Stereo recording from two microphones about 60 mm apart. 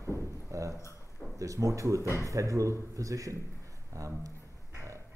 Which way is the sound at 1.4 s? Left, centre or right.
Right.